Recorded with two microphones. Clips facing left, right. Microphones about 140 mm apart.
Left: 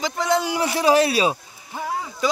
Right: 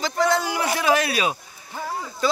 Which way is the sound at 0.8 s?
30° left (ahead or behind).